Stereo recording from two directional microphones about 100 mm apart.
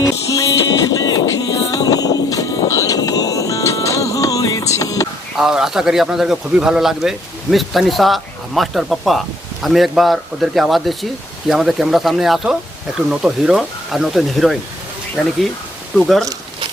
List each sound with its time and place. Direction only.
0.0 s music: 35° left (ahead or behind)
5.4 s speech: 5° right (ahead or behind)
16.0 s speech: centre (ahead or behind)